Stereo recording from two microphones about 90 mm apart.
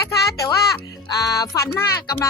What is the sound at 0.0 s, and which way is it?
Music, 35° left (ahead or behind).